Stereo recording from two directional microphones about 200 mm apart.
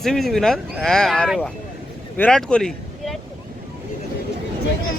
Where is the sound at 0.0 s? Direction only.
Centre (ahead or behind).